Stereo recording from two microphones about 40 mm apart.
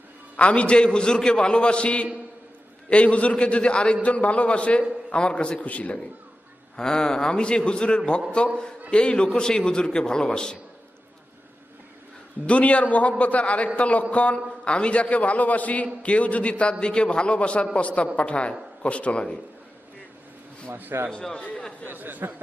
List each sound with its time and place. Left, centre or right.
0.3 s a man's voice: left
6.7 s a man's voice: centre
12.5 s a man's voice: left
20.9 s a man's voice: right
21.3 s a man's voice: left
21.8 s speech: right